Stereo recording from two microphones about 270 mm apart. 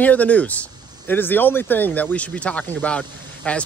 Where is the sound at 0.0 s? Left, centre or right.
Centre.